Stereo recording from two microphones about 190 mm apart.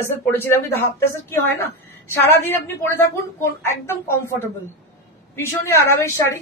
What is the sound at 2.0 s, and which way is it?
Speech, 15° left (ahead or behind).